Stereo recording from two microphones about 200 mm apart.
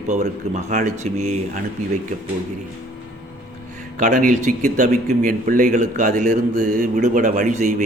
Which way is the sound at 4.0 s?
40° right (ahead or behind).